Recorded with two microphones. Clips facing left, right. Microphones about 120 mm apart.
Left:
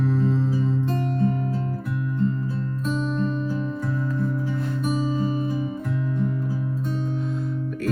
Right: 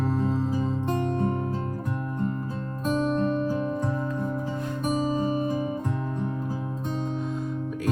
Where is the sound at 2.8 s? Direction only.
50° right (ahead or behind).